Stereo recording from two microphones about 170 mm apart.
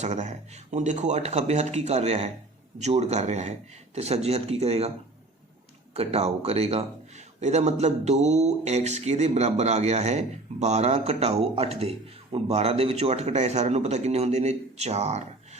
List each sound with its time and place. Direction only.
0.0 s a man's voice: 45° right (ahead or behind)
5.9 s a man's voice: 40° right (ahead or behind)